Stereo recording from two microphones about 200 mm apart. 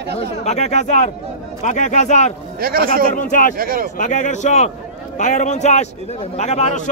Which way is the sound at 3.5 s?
45° right (ahead or behind).